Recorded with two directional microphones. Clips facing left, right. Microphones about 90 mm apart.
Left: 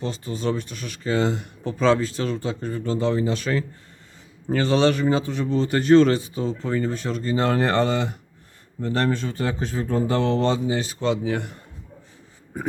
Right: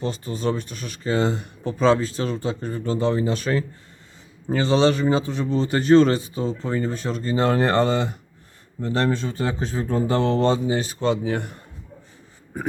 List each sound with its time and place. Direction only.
0.0 s speech: 45° right (ahead or behind)
4.4 s speech: 20° right (ahead or behind)
8.8 s speech: 20° right (ahead or behind); by 11.5 s 40° right (ahead or behind)